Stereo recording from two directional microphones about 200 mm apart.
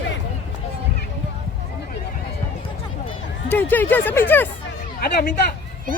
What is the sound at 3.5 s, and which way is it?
Speech, 10° left (ahead or behind).